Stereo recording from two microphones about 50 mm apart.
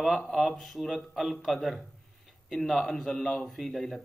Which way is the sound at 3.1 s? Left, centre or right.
Left.